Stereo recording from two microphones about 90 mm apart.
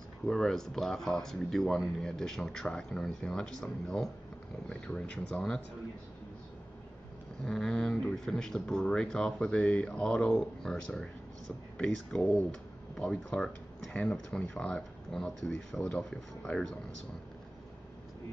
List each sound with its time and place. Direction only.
0.3 s speech: 5° left (ahead or behind)
7.4 s speech: 5° left (ahead or behind)